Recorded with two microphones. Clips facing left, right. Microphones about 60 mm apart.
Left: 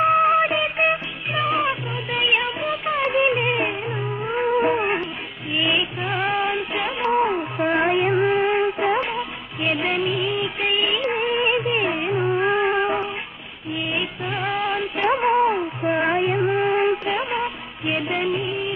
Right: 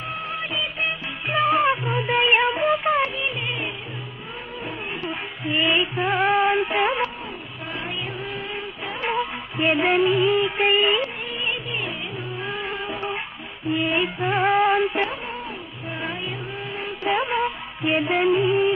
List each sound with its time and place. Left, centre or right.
0.0 s music: left
1.3 s music: centre
3.2 s music: left
5.5 s music: centre
7.2 s a sound: left
8.4 s music of bollywood: left
9.0 s music: centre
11.3 s music: left
14.4 s music: centre
15.0 s cat: left
16.0 s music: left
17.0 s music: centre